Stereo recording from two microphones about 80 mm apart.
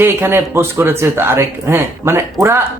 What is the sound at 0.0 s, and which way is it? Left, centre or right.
Speech, right.